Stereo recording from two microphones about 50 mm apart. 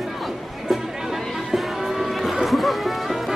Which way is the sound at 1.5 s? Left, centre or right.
Centre.